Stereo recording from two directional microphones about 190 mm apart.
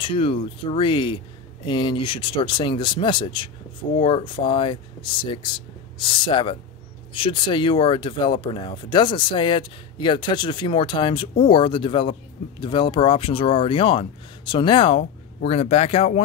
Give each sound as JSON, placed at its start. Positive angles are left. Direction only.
{"t": 0.0, "sound": "speech", "side_deg": 30}